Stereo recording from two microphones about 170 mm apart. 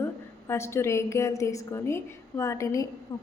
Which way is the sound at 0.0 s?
15° left (ahead or behind).